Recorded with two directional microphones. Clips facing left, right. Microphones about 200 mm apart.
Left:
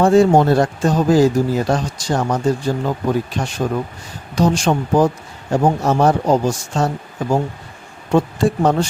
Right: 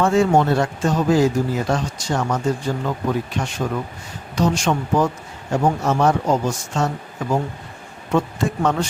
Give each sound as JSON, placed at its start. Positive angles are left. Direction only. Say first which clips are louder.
{"t": 0.0, "sound": "speech", "louder": "left 4 dB", "side_deg": 35}